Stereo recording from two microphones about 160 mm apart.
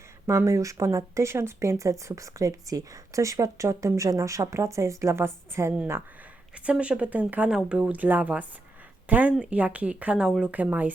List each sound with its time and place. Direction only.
0.3 s speech: 20° right (ahead or behind)